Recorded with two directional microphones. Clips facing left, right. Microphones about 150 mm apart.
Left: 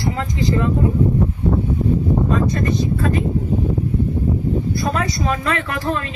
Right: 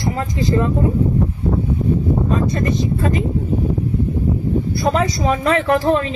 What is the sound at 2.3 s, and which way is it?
Speech, 25° right (ahead or behind).